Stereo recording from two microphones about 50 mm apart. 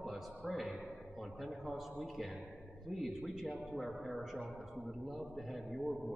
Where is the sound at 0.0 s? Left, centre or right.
Centre.